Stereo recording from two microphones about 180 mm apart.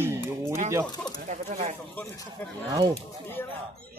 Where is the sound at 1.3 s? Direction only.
40° right (ahead or behind).